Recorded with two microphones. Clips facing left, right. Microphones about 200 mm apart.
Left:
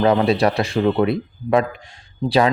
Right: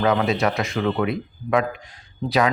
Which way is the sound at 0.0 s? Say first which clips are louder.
Left 4 dB; 35° left (ahead or behind).